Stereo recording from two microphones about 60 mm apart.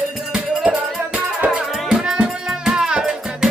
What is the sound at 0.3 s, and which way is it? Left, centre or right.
Music, right.